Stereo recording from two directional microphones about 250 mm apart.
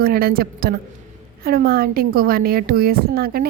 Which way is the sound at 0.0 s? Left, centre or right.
Right.